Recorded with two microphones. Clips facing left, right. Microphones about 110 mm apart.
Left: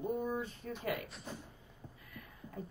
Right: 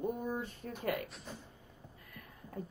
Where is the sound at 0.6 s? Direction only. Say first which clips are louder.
Right 2 dB; 50° right (ahead or behind).